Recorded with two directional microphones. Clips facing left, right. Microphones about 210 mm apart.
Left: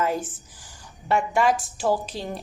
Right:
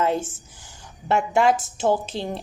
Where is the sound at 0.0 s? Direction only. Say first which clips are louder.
Right 3 dB; 25° right (ahead or behind).